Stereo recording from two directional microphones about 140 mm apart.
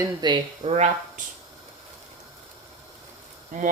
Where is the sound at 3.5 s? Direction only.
75° right (ahead or behind).